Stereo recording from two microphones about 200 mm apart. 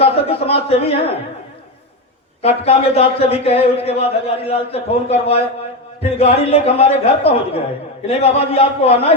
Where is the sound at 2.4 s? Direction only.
30° left (ahead or behind).